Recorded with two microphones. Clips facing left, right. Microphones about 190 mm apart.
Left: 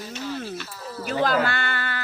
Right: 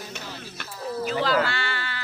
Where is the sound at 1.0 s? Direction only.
50° left (ahead or behind).